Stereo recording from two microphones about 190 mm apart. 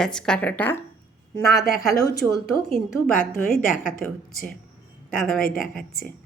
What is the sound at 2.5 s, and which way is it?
A woman's voice, 50° left (ahead or behind).